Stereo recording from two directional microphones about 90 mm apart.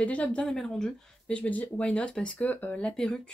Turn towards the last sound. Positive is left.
turn(degrees=5)  # may be behind; listen again after turning